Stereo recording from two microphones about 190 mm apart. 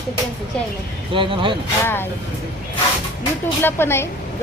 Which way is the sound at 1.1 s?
25° right (ahead or behind).